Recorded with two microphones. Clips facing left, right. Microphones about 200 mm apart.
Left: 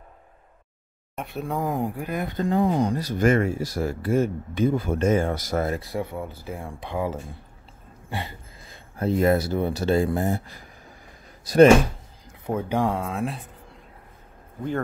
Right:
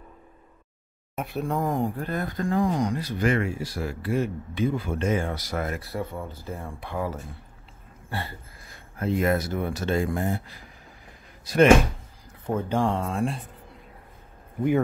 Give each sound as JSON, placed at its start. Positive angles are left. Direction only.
{"t": 1.1, "sound": "speech", "side_deg": 0}
{"t": 2.2, "sound": "speech", "side_deg": 25}
{"t": 5.9, "sound": "speech", "side_deg": 15}
{"t": 8.1, "sound": "a sound", "side_deg": 15}
{"t": 9.0, "sound": "speech", "side_deg": 35}
{"t": 12.4, "sound": "speech", "side_deg": 10}